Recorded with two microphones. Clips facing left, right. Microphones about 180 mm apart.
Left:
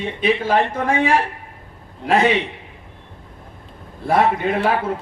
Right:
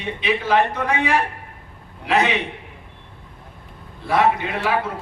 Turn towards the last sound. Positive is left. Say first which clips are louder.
# left 2 dB
turn(degrees=45)  # may be behind; listen again after turning